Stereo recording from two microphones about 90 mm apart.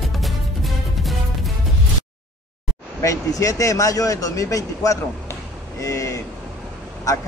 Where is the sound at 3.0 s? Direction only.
35° left (ahead or behind).